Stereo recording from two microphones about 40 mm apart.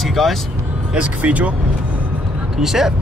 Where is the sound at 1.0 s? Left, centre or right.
Right.